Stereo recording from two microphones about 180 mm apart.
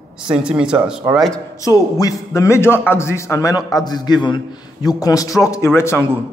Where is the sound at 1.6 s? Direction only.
20° left (ahead or behind).